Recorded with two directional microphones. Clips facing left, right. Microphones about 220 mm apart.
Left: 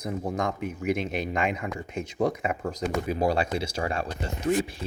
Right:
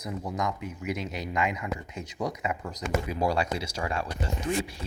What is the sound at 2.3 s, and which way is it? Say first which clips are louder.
Speech: left 4 dB; 50° left (ahead or behind).